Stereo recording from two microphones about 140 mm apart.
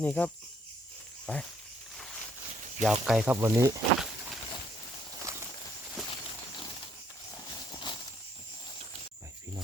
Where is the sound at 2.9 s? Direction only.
Centre (ahead or behind).